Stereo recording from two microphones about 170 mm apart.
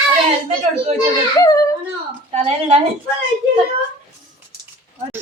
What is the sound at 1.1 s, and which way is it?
Speech, 20° left (ahead or behind).